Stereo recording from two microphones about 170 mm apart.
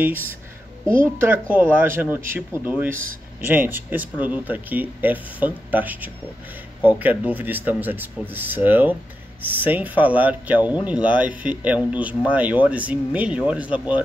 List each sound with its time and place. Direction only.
0.8 s speech: 50° right (ahead or behind)
1.5 s speech: 10° right (ahead or behind)